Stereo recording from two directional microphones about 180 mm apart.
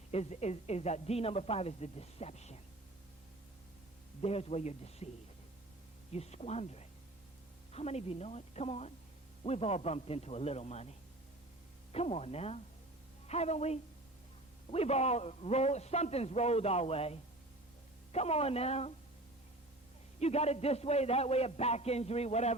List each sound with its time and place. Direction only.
0.1 s a man's voice: 35° left (ahead or behind)
4.2 s a man's voice: 35° left (ahead or behind)
6.1 s a man's voice: 35° left (ahead or behind)
20.1 s a man's voice: 35° left (ahead or behind)